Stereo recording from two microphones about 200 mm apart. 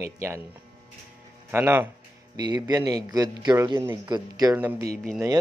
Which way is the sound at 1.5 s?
10° right (ahead or behind).